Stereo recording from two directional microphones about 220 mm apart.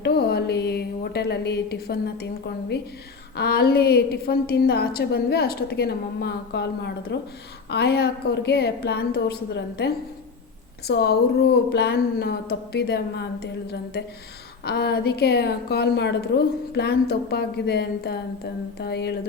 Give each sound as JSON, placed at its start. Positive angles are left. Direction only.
{"t": 0.0, "sound": "a woman's voice", "side_deg": 45}